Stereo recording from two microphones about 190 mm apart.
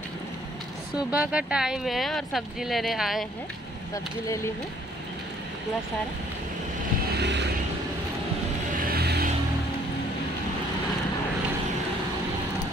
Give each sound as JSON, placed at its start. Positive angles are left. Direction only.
{"t": 0.9, "sound": "speech", "side_deg": -5}
{"t": 7.2, "sound": "vehicle", "side_deg": -65}
{"t": 8.7, "sound": "music", "side_deg": -50}